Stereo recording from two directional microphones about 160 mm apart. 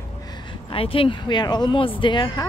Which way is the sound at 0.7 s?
35° left (ahead or behind).